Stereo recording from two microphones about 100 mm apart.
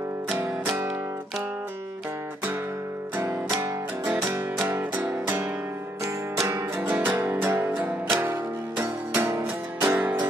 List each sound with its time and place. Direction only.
0.4 s music: 25° right (ahead or behind)
4.3 s music: 20° right (ahead or behind)
9.2 s music: 25° right (ahead or behind)